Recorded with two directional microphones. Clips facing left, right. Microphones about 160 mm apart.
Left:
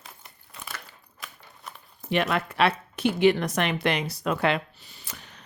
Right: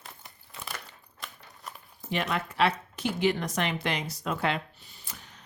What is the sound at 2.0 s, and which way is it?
A woman's voice, 65° left (ahead or behind).